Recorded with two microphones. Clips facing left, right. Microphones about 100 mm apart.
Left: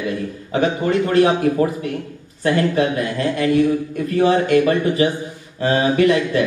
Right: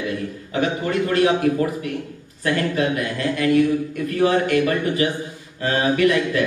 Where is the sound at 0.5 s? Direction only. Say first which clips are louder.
Left 4 dB; 30° left (ahead or behind).